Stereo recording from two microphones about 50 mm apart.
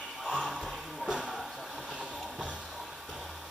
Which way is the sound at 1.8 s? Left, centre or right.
Right.